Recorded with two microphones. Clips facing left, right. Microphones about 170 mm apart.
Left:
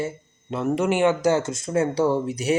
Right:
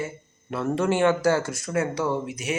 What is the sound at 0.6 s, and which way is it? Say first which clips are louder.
Speech: left 1 dB; 15° left (ahead or behind).